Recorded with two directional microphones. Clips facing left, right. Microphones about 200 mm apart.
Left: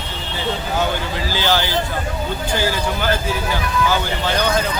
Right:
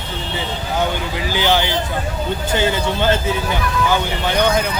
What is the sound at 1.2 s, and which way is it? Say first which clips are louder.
Speech: right 3 dB; 15° right (ahead or behind).